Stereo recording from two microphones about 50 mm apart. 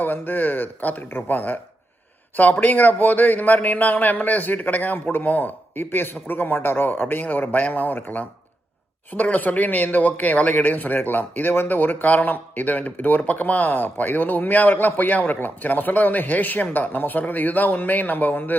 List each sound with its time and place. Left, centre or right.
0.0 s speech: left